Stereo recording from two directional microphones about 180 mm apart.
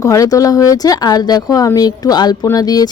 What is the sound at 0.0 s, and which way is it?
Speech, 20° left (ahead or behind).